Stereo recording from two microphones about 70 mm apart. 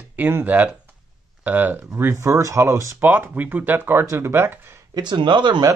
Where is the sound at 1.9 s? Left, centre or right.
Right.